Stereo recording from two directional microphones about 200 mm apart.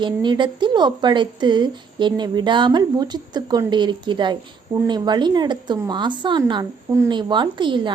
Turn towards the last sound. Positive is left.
turn(degrees=-25)  # may be behind; listen again after turning